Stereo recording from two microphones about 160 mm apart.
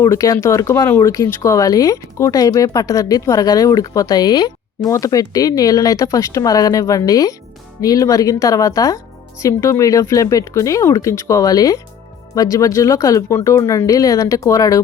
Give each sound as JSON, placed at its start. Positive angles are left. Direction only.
{"t": 0.0, "sound": "speech", "side_deg": 20}